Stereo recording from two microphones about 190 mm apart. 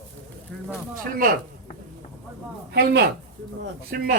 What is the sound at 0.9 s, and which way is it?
Speech, 50° right (ahead or behind).